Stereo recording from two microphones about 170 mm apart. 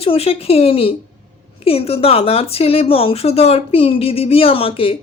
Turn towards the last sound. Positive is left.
turn(degrees=35)  # may be behind; listen again after turning